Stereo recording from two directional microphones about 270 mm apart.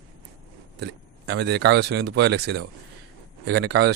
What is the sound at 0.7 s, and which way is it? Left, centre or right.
Speech, right.